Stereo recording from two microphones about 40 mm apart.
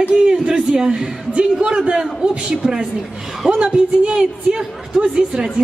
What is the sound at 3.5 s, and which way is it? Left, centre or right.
A woman's voice, right.